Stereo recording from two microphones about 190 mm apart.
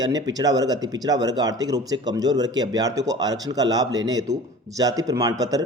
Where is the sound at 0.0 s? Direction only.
20° right (ahead or behind).